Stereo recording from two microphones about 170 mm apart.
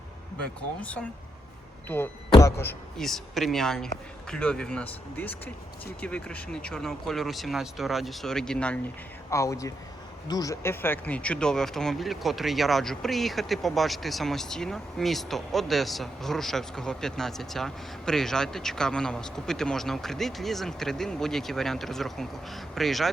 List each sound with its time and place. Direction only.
0.8 s speech: 5° left (ahead or behind)
2.3 s speech: 15° left (ahead or behind)
3.0 s speech: centre (ahead or behind)
9.3 s speech: 20° left (ahead or behind); by 23.0 s centre (ahead or behind)